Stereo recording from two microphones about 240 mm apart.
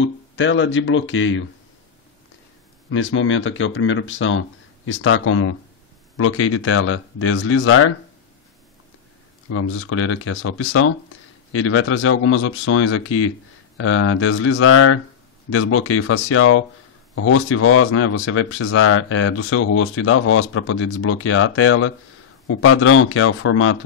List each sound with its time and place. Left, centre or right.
0.0 s speech: left
2.9 s speech: left
9.5 s speech: left